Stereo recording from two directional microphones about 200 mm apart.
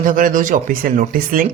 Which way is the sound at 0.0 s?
45° right (ahead or behind).